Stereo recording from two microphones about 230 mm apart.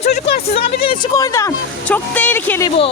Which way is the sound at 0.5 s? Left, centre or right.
Centre.